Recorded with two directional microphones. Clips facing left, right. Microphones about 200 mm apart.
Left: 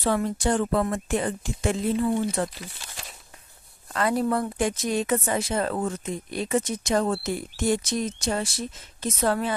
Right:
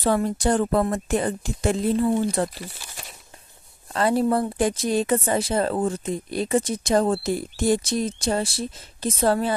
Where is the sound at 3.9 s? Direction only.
30° right (ahead or behind).